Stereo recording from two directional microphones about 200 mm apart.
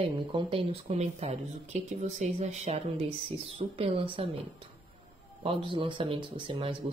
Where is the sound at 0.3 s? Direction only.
25° right (ahead or behind).